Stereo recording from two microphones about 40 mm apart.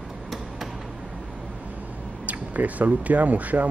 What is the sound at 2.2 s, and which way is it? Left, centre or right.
Speech, right.